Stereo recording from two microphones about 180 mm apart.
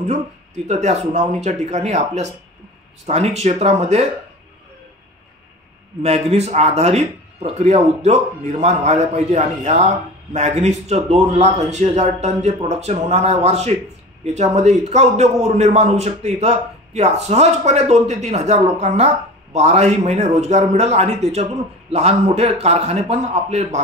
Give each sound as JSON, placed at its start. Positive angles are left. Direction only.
{"t": 0.7, "sound": "a man's voice", "side_deg": -40}
{"t": 6.0, "sound": "a man's voice", "side_deg": -35}